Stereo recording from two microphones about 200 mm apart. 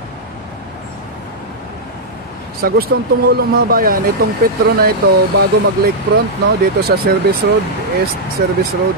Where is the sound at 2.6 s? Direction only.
50° right (ahead or behind).